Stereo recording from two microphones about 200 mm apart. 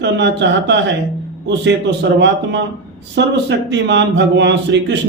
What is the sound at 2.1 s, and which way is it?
Speech, 60° right (ahead or behind).